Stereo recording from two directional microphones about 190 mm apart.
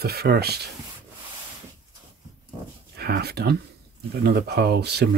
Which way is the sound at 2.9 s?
55° right (ahead or behind).